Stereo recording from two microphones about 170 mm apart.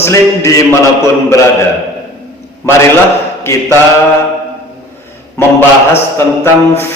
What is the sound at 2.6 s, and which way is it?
Speech, 15° left (ahead or behind).